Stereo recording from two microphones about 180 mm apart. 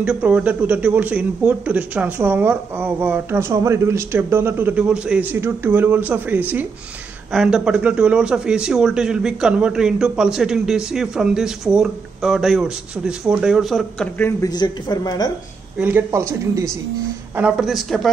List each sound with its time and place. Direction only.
0.0 s a man's voice: 10° right (ahead or behind); by 14.5 s 10° left (ahead or behind)
14.5 s a woman's voice: 25° left (ahead or behind)
15.8 s speech: 10° right (ahead or behind)
17.4 s a man's voice: 5° right (ahead or behind)